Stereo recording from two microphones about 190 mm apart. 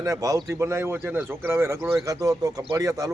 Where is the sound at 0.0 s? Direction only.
15° right (ahead or behind).